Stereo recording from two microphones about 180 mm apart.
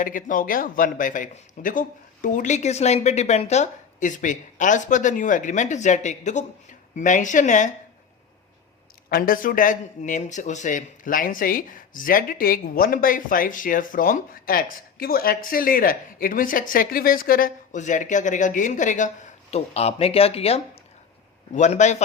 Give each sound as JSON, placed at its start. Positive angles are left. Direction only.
{"t": 0.0, "sound": "speech", "side_deg": 50}
{"t": 9.0, "sound": "a man's voice", "side_deg": 55}